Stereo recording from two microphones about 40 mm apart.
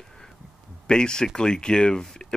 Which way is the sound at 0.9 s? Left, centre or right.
Left.